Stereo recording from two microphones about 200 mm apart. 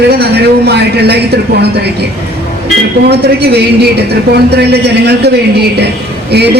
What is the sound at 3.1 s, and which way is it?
A man's voice, 55° right (ahead or behind).